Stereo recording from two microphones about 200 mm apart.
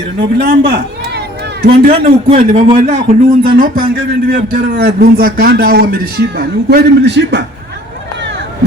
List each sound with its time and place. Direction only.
0.2 s a man's voice: 45° right (ahead or behind)
1.6 s a man's voice: 50° right (ahead or behind)